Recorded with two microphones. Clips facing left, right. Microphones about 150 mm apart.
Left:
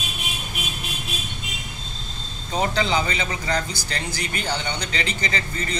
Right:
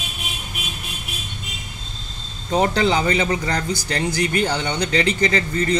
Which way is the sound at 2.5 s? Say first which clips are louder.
Right 5 dB; 45° right (ahead or behind).